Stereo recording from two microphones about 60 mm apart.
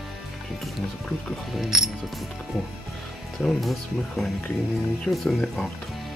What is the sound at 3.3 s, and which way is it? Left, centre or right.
Speech, centre.